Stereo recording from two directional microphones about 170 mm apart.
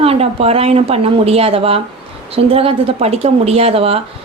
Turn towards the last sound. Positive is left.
turn(degrees=-35)  # may be behind; listen again after turning